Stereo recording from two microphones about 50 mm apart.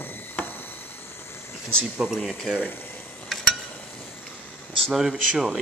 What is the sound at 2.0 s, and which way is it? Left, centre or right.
Speech, centre.